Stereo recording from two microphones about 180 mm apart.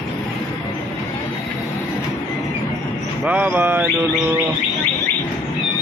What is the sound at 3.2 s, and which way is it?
Music, 10° right (ahead or behind).